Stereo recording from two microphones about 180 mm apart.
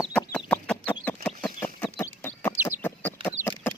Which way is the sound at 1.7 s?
10° left (ahead or behind).